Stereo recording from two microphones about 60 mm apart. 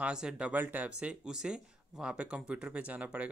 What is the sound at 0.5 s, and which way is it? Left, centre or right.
Speech, right.